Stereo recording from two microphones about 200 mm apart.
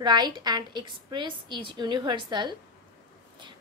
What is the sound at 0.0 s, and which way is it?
A woman's voice, 20° right (ahead or behind).